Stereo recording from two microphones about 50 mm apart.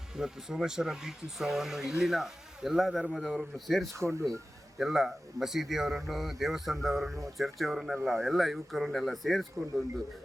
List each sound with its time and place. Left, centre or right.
0.2 s speech: centre
3.9 s speech: right
4.8 s speech: centre